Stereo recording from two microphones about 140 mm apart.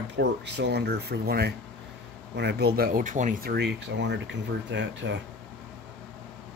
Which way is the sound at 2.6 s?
90° right.